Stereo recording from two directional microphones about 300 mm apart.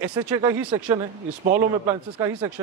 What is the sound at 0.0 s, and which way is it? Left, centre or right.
Speech, centre.